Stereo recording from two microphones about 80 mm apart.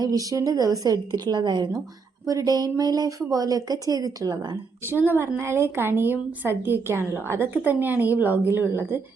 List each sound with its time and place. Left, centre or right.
0.0 s speech: right
2.2 s speech: right
4.9 s a woman's voice: right